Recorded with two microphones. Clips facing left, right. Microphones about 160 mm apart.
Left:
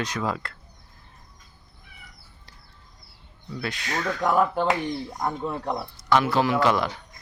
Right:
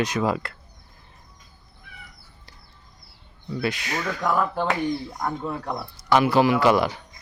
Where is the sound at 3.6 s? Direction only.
5° right (ahead or behind).